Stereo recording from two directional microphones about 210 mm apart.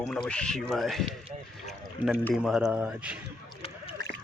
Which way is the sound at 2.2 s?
10° left (ahead or behind).